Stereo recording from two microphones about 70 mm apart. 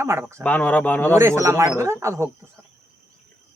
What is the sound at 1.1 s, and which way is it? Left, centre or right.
Speech, right.